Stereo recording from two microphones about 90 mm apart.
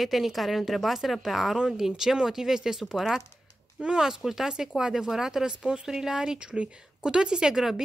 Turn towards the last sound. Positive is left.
turn(degrees=-5)  # may be behind; listen again after turning